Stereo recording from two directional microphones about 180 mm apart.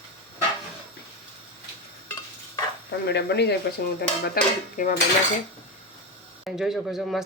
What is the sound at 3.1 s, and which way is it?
Speech, 70° left (ahead or behind).